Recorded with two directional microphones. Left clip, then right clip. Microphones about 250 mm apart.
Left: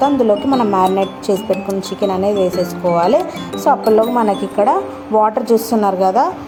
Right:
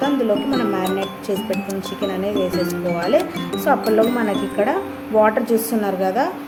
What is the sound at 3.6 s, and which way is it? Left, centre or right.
A woman's voice, centre.